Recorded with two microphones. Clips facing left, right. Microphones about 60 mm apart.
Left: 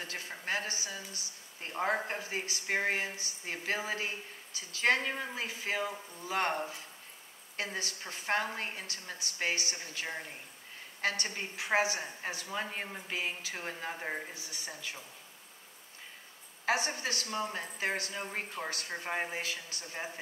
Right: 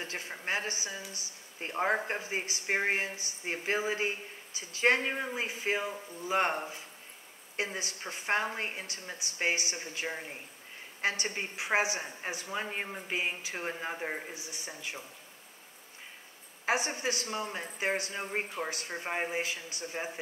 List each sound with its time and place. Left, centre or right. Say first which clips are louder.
0.0 s a sound: right 2 dB; right
0.5 s a woman's voice: right 1 dB; right
7.5 s a woman's voice: right 2 dB; right
16.6 s a woman's voice: right 1 dB; right